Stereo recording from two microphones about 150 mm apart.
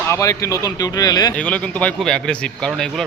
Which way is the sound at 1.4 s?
10° left (ahead or behind).